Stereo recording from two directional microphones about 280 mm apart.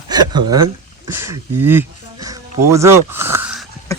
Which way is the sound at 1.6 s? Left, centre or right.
Centre.